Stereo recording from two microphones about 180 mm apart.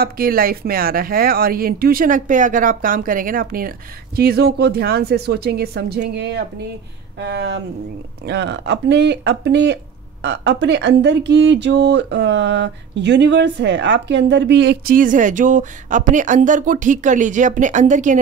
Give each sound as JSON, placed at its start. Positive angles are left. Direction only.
{"t": 0.0, "sound": "a woman's voice", "side_deg": -55}
{"t": 15.0, "sound": "speech", "side_deg": -45}